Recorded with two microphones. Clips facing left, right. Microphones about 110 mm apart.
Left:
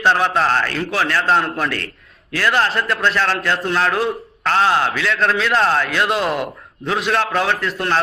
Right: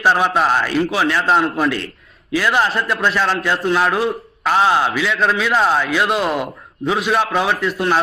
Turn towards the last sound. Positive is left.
turn(degrees=-10)  # may be behind; listen again after turning